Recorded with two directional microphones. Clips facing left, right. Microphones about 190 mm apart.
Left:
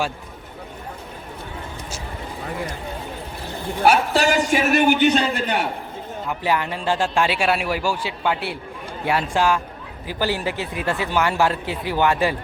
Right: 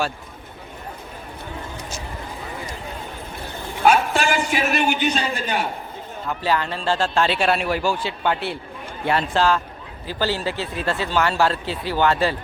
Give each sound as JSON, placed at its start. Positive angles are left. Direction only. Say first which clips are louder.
{"t": 3.8, "sound": "a man's voice", "louder": "left 1 dB", "side_deg": 40}
{"t": 6.2, "sound": "speech", "louder": "even", "side_deg": 15}